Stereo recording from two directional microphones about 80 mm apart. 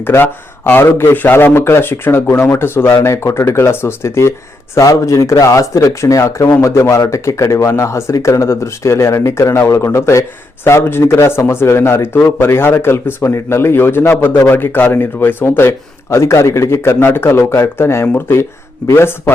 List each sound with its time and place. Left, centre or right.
0.0 s speech: left